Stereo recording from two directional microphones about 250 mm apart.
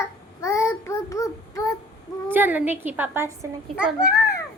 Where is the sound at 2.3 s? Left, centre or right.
Centre.